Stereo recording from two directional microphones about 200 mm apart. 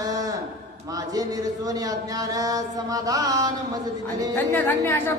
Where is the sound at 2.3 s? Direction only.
15° right (ahead or behind).